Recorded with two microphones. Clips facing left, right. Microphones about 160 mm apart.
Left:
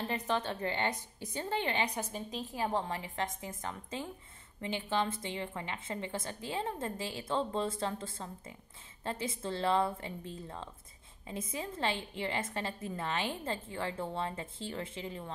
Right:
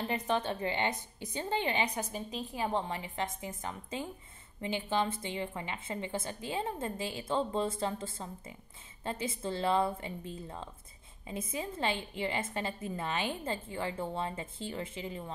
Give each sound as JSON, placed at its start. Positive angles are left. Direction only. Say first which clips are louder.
{"t": 0.0, "sound": "a woman's voice", "louder": "right 2 dB", "side_deg": -15}
{"t": 2.0, "sound": "a woman's voice", "louder": "right 1 dB", "side_deg": 0}